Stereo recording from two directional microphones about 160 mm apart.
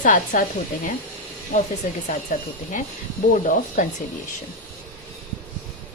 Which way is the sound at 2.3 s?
50° left (ahead or behind).